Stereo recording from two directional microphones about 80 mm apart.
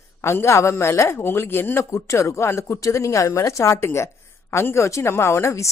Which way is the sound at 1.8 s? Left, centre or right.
Left.